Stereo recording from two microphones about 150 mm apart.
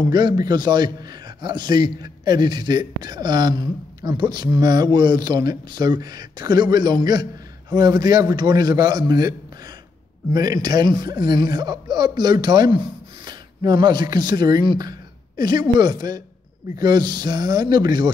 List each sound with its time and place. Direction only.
0.1 s a man's voice: 30° right (ahead or behind)
10.3 s a man's voice: 25° right (ahead or behind)